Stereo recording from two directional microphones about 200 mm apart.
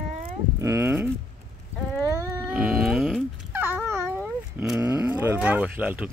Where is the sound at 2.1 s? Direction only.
15° right (ahead or behind).